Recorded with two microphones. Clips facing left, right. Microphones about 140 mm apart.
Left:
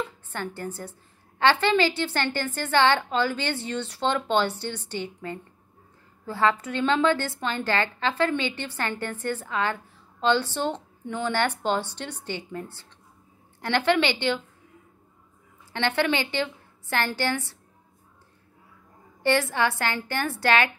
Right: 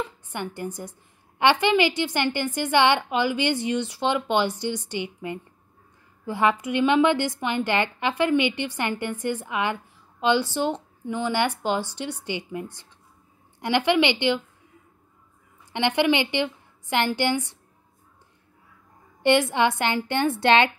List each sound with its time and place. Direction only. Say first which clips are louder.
0.0 s a woman's voice: right 1 dB; 15° right (ahead or behind)
15.7 s a woman's voice: right 3 dB; 15° right (ahead or behind)
19.2 s a woman's voice: right 3 dB; 20° right (ahead or behind)